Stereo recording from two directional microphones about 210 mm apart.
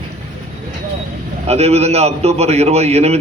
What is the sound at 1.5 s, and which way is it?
A man's voice, 30° right (ahead or behind).